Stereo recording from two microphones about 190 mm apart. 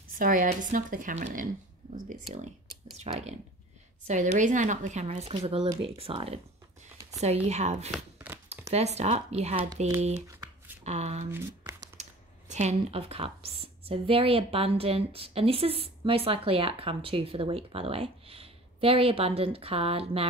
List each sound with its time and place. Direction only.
0.2 s speech: 45° right (ahead or behind)
3.0 s speech: 35° right (ahead or behind)
7.4 s speech: 35° right (ahead or behind)
7.9 s a sound: 5° right (ahead or behind)
8.5 s speech: 35° right (ahead or behind)
10.8 s speech: 35° right (ahead or behind)
11.3 s shuffling cards: 15° right (ahead or behind)
12.0 s speech: 35° right (ahead or behind)